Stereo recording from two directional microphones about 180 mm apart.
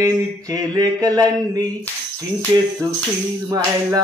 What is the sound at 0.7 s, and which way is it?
Mantra, 20° right (ahead or behind).